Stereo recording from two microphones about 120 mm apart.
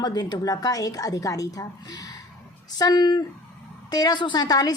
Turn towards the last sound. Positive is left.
turn(degrees=35)  # may be behind; listen again after turning